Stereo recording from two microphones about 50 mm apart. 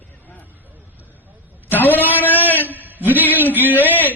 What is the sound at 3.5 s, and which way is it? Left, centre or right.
Speech, right.